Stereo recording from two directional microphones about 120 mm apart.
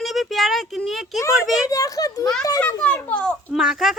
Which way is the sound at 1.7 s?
30° left (ahead or behind).